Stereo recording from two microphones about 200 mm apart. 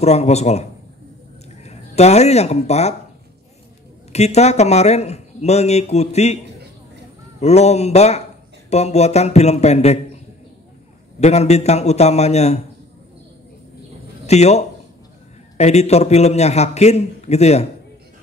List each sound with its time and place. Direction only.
0.0 s a man's voice: 35° left (ahead or behind)
4.1 s a man's voice: 35° left (ahead or behind)
11.1 s a man's voice: 35° left (ahead or behind)
14.2 s a man's voice: 35° left (ahead or behind)